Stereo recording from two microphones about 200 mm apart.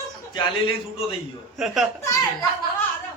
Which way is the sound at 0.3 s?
25° left (ahead or behind).